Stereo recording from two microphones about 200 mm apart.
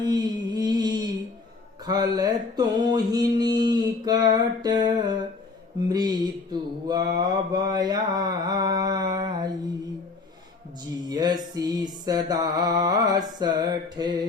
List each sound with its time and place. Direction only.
0.0 s a sound: 20° right (ahead or behind)
1.8 s mantra: 20° right (ahead or behind)
11.1 s music: 20° right (ahead or behind)
11.5 s mantra: 20° right (ahead or behind)